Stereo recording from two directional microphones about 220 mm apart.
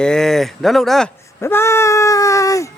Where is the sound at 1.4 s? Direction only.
10° left (ahead or behind).